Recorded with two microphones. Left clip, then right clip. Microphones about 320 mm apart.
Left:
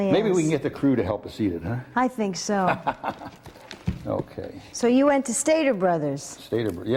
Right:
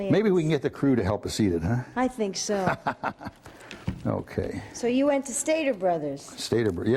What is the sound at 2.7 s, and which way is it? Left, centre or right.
Speech, right.